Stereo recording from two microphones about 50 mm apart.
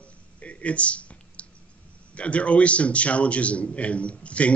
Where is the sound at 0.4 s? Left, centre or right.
Left.